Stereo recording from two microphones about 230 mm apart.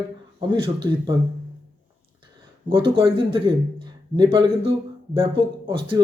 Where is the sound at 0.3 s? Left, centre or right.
Right.